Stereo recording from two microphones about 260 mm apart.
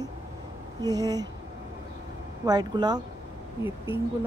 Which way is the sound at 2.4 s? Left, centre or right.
Centre.